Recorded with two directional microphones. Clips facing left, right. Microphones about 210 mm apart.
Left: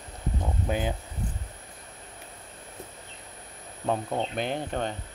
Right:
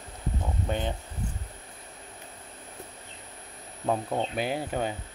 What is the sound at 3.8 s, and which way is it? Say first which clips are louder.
Speech: even; centre (ahead or behind).